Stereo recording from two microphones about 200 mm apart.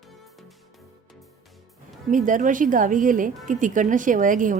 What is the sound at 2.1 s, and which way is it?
A woman's voice, 40° right (ahead or behind).